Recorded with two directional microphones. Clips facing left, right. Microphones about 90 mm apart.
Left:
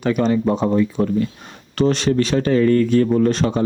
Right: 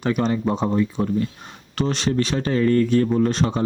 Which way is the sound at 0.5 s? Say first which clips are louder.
Left 4 dB; 15° right (ahead or behind).